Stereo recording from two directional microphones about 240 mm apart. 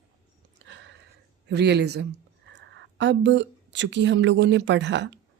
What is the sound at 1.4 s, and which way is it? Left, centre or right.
Speech, right.